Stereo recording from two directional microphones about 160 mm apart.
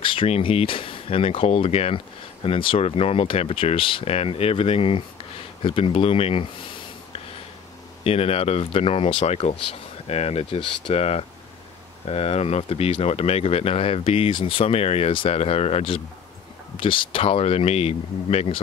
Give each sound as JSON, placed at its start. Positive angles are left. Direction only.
{"t": 0.0, "sound": "speech", "side_deg": 35}
{"t": 8.0, "sound": "speech", "side_deg": 40}